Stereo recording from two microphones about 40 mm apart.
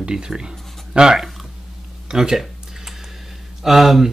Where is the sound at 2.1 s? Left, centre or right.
Centre.